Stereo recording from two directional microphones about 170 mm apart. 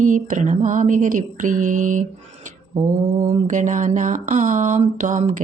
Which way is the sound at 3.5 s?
50° right (ahead or behind).